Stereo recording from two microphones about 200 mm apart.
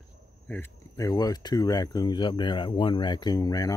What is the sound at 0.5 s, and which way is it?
Speech, 15° left (ahead or behind).